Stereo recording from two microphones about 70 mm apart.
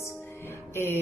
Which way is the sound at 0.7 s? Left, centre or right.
Left.